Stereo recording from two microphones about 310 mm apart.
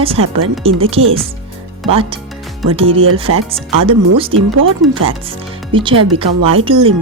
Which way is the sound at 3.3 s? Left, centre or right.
Right.